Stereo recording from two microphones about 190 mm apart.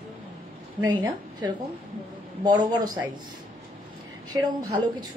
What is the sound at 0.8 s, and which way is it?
A woman's voice, 20° right (ahead or behind).